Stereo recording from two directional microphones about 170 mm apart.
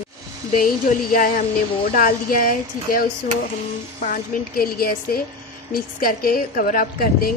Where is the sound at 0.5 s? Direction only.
55° left (ahead or behind).